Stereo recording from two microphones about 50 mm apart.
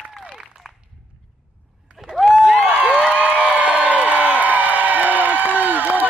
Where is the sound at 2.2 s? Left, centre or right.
Centre.